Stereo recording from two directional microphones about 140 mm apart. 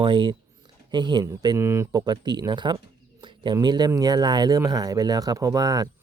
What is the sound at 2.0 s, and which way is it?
Speech, 30° right (ahead or behind).